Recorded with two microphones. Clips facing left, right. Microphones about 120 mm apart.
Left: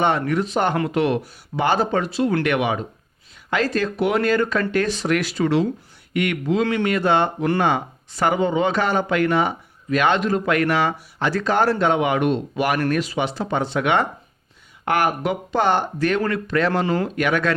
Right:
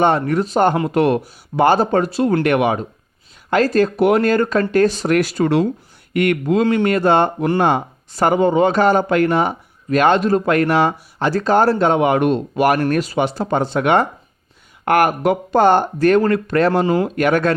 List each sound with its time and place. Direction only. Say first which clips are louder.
0.0 s speech: right 4 dB; 35° right (ahead or behind)